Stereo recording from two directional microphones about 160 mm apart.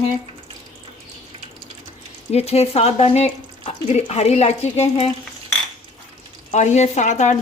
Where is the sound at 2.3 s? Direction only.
40° left (ahead or behind).